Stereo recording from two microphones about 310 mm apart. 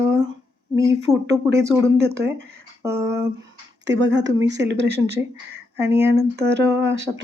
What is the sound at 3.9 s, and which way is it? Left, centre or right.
Speech, right.